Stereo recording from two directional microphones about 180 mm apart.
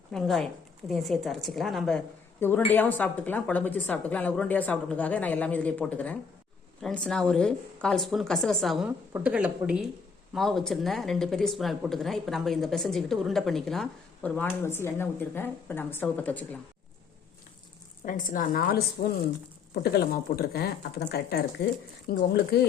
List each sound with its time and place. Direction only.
0.1 s speech: centre (ahead or behind)
2.4 s a woman's voice: 10° left (ahead or behind)
18.0 s a woman's voice: 45° left (ahead or behind); by 22.7 s 65° left (ahead or behind)